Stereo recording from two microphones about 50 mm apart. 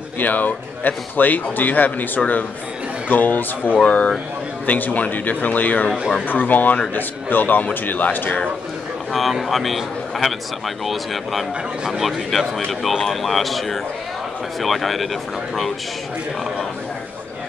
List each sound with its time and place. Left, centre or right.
0.2 s speech: left
9.1 s speech: centre
12.0 s speech: centre